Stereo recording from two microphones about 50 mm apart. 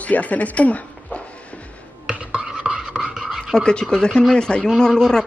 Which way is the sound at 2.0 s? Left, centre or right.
Right.